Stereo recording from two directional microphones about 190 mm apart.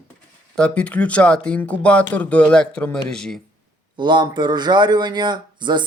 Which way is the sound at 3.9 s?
25° right (ahead or behind).